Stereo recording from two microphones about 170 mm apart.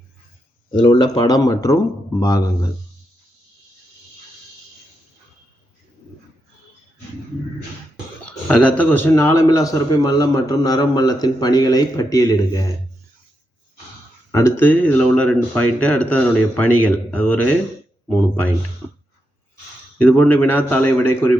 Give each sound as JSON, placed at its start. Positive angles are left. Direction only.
{"t": 0.7, "sound": "a man's voice", "side_deg": 25}
{"t": 8.2, "sound": "a man's voice", "side_deg": 5}
{"t": 14.3, "sound": "a man's voice", "side_deg": 15}
{"t": 20.0, "sound": "a man's voice", "side_deg": 10}